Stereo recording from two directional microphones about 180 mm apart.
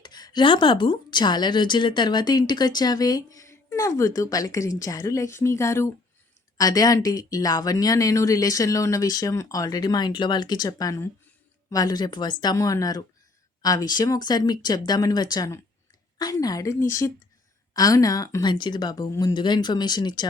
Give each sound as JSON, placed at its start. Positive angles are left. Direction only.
{"t": 0.0, "sound": "a woman's voice", "side_deg": 25}
{"t": 17.7, "sound": "a woman's voice", "side_deg": 20}